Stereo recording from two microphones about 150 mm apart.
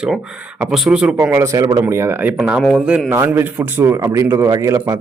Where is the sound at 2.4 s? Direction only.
Centre (ahead or behind).